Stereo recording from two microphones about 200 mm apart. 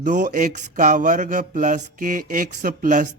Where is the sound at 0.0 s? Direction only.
40° right (ahead or behind).